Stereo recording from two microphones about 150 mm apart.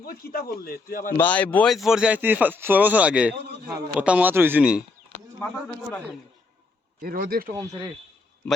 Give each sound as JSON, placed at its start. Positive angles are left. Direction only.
{"t": 0.0, "sound": "a man's voice", "side_deg": 90}
{"t": 1.1, "sound": "speech", "side_deg": 10}
{"t": 1.7, "sound": "speech", "side_deg": 0}
{"t": 3.3, "sound": "a sound", "side_deg": -90}
{"t": 4.0, "sound": "speech", "side_deg": -10}
{"t": 5.4, "sound": "speech", "side_deg": 5}
{"t": 7.0, "sound": "speech", "side_deg": -70}
{"t": 7.5, "sound": "speech", "side_deg": -25}